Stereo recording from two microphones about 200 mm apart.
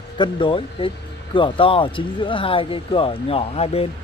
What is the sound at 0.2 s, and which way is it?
Speech, 25° left (ahead or behind).